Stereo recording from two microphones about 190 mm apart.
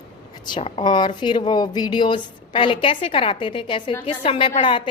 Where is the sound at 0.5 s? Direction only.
30° left (ahead or behind).